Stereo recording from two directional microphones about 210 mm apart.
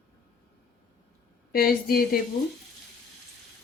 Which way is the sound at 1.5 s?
45° left (ahead or behind).